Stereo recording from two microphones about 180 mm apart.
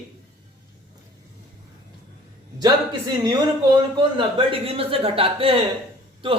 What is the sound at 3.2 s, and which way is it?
A man's voice, 20° right (ahead or behind).